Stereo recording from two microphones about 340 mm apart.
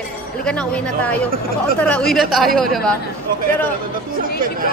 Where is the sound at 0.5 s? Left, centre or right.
Centre.